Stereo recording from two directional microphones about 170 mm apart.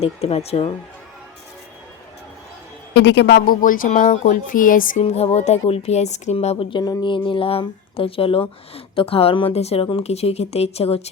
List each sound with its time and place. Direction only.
0.0 s a woman's voice: 35° left (ahead or behind)
2.9 s a woman's voice: 90° left; by 5.0 s 50° left (ahead or behind)
5.0 s a woman's voice: 40° left (ahead or behind)